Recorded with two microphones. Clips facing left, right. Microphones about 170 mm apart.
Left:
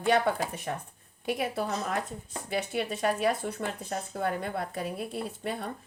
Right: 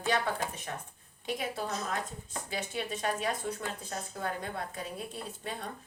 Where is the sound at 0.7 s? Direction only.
40° left (ahead or behind).